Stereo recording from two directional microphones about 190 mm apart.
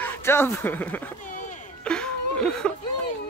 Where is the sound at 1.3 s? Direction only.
45° left (ahead or behind).